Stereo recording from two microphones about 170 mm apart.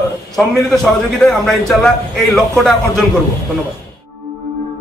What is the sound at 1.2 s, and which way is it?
A man's voice, 5° left (ahead or behind).